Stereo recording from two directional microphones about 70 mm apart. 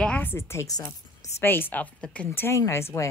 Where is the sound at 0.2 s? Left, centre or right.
Left.